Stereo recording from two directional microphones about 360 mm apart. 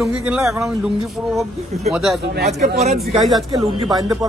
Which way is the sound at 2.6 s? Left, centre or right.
Right.